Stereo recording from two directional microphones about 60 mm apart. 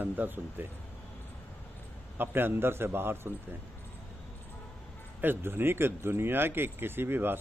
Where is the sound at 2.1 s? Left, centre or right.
Right.